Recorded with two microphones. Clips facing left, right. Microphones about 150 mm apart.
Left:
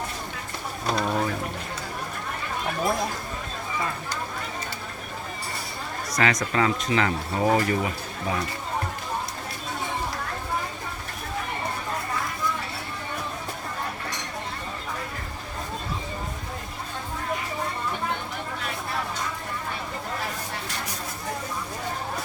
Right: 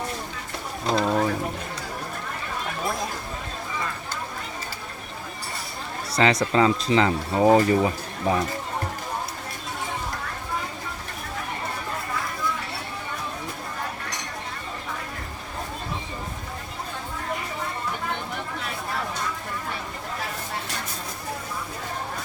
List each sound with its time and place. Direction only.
0.9 s speech: 25° right (ahead or behind)
6.1 s speech: 30° right (ahead or behind)